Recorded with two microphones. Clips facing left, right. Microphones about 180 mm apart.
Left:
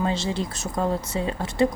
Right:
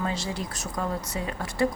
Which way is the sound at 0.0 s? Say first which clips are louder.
Left 5 dB; 25° left (ahead or behind).